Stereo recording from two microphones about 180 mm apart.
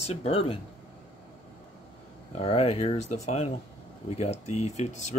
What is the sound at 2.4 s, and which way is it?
Speech, 35° left (ahead or behind).